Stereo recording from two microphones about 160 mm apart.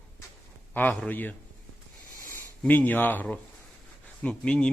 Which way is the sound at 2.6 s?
10° left (ahead or behind).